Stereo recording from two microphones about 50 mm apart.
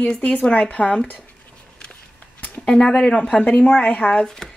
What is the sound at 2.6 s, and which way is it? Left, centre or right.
Speech, centre.